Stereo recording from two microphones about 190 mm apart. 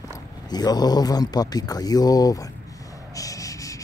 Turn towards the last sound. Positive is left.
turn(degrees=15)  # may be behind; listen again after turning